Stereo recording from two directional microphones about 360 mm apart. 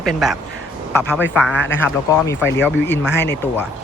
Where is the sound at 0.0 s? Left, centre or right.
Centre.